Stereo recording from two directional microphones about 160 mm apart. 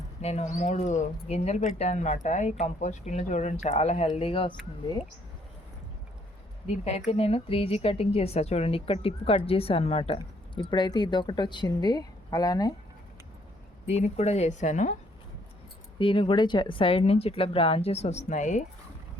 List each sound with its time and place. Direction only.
0.2 s speech: 40° left (ahead or behind)
6.7 s a woman's voice: 40° left (ahead or behind); by 12.7 s 25° left (ahead or behind)
13.8 s speech: 40° left (ahead or behind)
16.0 s a woman's voice: 35° left (ahead or behind); by 18.6 s 50° left (ahead or behind)